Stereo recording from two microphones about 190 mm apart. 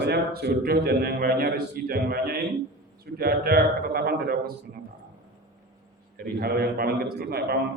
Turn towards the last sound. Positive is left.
turn(degrees=-55)  # may be behind; listen again after turning